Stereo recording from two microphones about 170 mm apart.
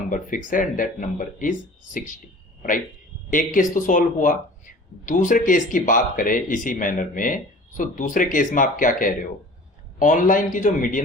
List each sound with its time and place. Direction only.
0.1 s speech: 50° left (ahead or behind)
3.2 s speech: 50° left (ahead or behind)